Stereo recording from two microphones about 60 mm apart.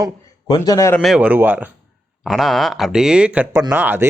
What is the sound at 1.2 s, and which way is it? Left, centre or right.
Speech, right.